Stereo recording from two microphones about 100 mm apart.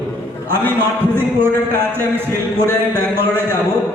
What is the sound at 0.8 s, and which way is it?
A man's voice, 20° right (ahead or behind).